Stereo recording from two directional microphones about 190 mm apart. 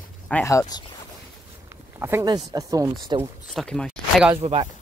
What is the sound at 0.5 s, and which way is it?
Speech, 20° left (ahead or behind).